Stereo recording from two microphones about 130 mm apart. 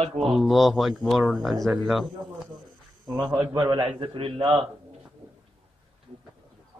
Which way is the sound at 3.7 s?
35° right (ahead or behind).